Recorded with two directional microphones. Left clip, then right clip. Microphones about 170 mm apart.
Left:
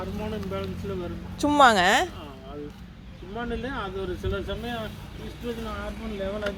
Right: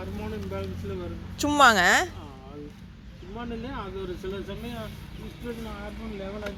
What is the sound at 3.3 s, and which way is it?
Speech, 10° right (ahead or behind).